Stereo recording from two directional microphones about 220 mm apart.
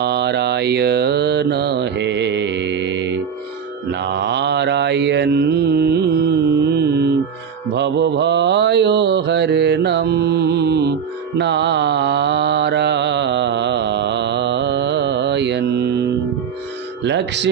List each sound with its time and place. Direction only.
0.0 s mantra: 50° right (ahead or behind)
17.0 s music: 50° right (ahead or behind)